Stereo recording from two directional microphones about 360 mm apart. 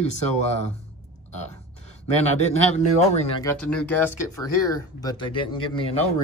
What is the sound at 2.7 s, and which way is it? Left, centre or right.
Speech, centre.